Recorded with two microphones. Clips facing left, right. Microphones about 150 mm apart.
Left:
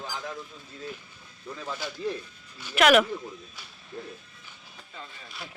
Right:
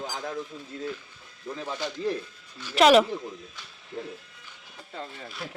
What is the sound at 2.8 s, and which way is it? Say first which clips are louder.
Speech: right 2 dB; 30° right (ahead or behind).